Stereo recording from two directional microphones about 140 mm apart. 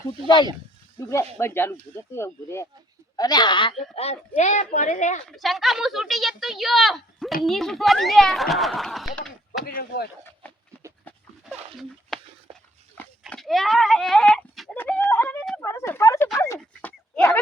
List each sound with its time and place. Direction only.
0.9 s speech: 20° left (ahead or behind)
3.2 s speech: 30° left (ahead or behind)
3.9 s speech: 50° left (ahead or behind)
5.3 s speech: centre (ahead or behind)
9.6 s speech: 90° left
12.1 s a sound: 5° left (ahead or behind)
12.5 s dog: 45° right (ahead or behind)
13.2 s speech: centre (ahead or behind)
14.8 s a sound: 10° left (ahead or behind)